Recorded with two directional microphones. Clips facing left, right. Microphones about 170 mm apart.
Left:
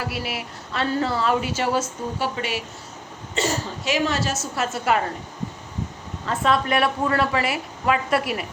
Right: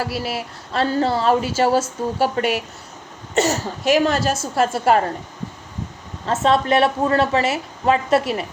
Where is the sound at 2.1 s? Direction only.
45° right (ahead or behind).